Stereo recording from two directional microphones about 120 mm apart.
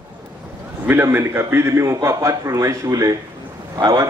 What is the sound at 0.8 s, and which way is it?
A man's voice, 20° right (ahead or behind).